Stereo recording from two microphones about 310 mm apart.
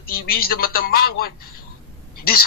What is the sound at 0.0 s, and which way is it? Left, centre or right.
Speech, left.